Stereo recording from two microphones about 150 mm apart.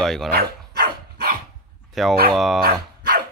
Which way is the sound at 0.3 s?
90° right.